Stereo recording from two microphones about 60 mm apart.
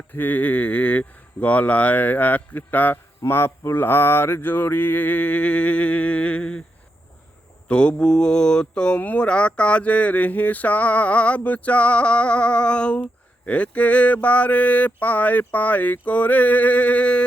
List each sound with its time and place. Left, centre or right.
0.1 s mantra: left
7.7 s mantra: centre